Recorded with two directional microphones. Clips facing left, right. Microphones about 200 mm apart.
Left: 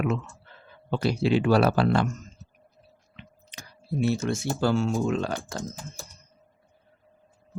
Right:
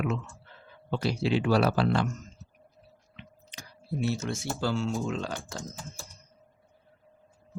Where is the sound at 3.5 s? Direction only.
55° left (ahead or behind).